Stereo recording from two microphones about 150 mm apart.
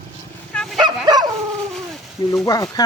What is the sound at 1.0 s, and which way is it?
Dog, 25° right (ahead or behind).